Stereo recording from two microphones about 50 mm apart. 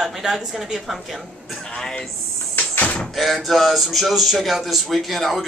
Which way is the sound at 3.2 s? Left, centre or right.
Centre.